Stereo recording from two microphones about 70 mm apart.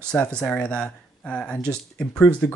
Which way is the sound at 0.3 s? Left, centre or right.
Centre.